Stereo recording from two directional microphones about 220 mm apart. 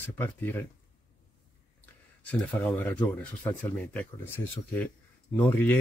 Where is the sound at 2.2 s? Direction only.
5° left (ahead or behind).